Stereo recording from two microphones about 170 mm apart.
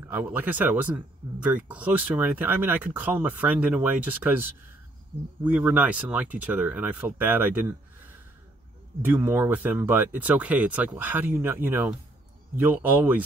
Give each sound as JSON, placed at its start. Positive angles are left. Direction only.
{"t": 0.1, "sound": "speech", "side_deg": -10}
{"t": 9.0, "sound": "speech", "side_deg": -10}